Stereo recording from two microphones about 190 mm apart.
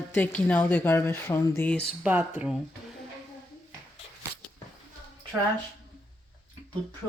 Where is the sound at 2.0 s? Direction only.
10° right (ahead or behind).